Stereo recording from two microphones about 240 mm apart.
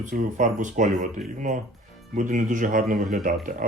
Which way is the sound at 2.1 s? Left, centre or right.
Right.